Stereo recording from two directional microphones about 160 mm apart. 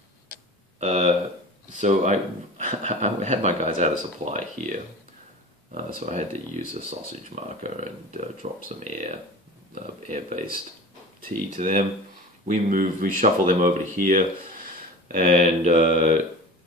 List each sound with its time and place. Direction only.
0.7 s a sound: 40° right (ahead or behind)
1.8 s speech: 45° right (ahead or behind)
5.8 s speech: 55° right (ahead or behind)
15.2 s speech: 45° right (ahead or behind)